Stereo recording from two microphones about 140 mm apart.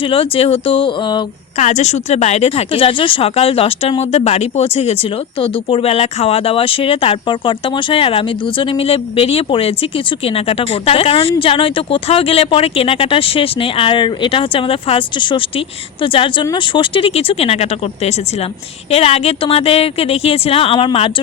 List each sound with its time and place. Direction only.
0.0 s speech: 40° left (ahead or behind)
1.5 s speech: 55° left (ahead or behind)